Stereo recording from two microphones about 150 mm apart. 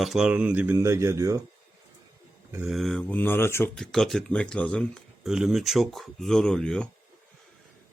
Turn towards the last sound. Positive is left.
turn(degrees=5)  # may be behind; listen again after turning